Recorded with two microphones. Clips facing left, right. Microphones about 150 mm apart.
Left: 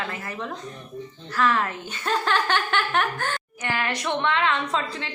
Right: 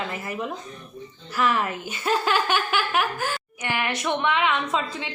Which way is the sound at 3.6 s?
15° right (ahead or behind).